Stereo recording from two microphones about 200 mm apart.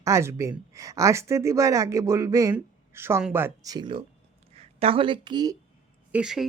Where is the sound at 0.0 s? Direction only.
15° right (ahead or behind).